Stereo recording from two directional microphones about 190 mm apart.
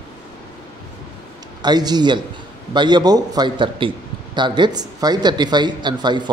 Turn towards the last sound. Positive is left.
turn(degrees=-25)  # may be behind; listen again after turning